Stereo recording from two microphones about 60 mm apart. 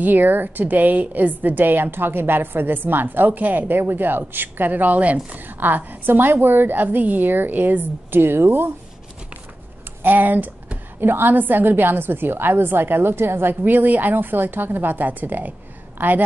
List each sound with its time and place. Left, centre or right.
0.0 s a woman's voice: right
10.0 s a woman's voice: right